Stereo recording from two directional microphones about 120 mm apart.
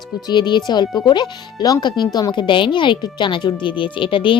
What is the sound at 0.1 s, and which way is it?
A woman's voice, 35° left (ahead or behind).